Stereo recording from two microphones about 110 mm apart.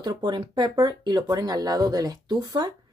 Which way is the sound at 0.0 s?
40° right (ahead or behind).